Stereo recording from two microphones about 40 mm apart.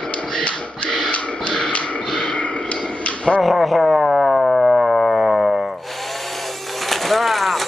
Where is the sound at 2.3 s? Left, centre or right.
Left.